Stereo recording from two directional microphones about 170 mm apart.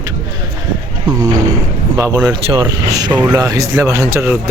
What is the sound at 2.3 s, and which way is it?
A man's voice, 30° right (ahead or behind).